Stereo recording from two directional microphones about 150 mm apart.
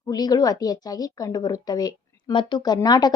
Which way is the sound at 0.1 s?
25° left (ahead or behind).